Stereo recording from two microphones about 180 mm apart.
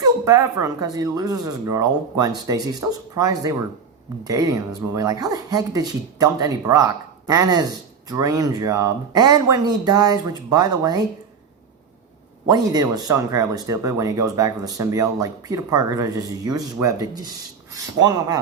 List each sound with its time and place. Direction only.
0.0 s speech: 20° right (ahead or behind)
12.5 s speech: 20° right (ahead or behind)